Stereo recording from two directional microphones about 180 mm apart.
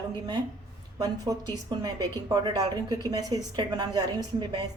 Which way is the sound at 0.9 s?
20° right (ahead or behind).